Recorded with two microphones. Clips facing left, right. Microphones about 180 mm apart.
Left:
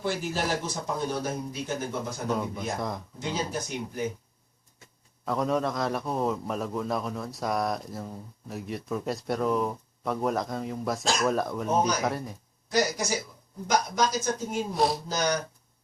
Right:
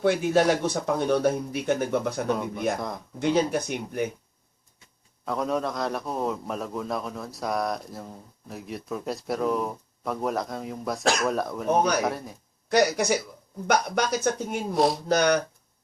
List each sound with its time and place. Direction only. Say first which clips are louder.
0.0 s speech: right 9 dB; 65° right (ahead or behind)
2.7 s a man's voice: even; centre (ahead or behind)
3.2 s speech: right 10 dB; 65° right (ahead or behind)
5.2 s a man's voice: even; centre (ahead or behind)
12.6 s speech: right 5 dB; 65° right (ahead or behind)
14.7 s a man's voice: right 4 dB; centre (ahead or behind)
15.1 s speech: right 6 dB; 65° right (ahead or behind)